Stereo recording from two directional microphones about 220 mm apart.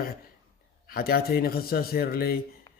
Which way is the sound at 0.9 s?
45° left (ahead or behind).